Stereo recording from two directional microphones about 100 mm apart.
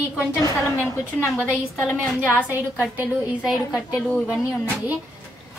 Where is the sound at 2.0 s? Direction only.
15° left (ahead or behind).